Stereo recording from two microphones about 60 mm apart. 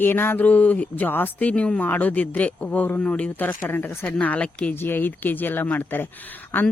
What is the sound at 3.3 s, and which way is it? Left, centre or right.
Speech, left.